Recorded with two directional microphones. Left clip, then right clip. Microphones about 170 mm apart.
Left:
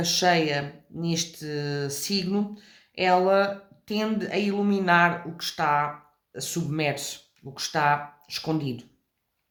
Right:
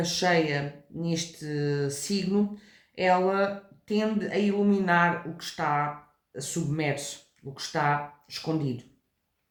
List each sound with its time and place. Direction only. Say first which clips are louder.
0.0 s speech: left 3 dB; 45° left (ahead or behind)